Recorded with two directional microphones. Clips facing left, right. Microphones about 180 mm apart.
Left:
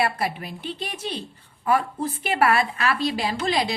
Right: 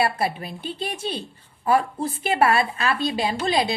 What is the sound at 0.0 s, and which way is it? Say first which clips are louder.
A woman's voice: right 2 dB; 30° right (ahead or behind).